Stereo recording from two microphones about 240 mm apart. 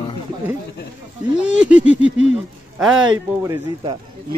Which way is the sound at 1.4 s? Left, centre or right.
Centre.